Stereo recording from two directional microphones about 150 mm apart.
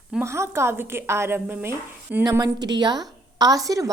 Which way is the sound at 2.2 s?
25° right (ahead or behind).